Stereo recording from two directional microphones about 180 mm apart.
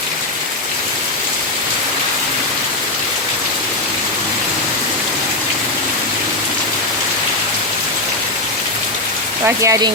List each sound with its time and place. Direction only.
9.6 s speech: 20° right (ahead or behind)